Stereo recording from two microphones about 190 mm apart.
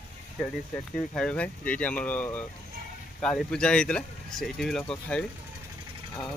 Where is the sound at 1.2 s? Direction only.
5° left (ahead or behind).